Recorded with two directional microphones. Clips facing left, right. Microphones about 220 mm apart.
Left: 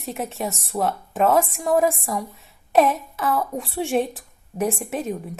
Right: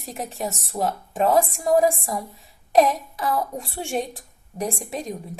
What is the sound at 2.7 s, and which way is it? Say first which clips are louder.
A woman's voice: even; centre (ahead or behind).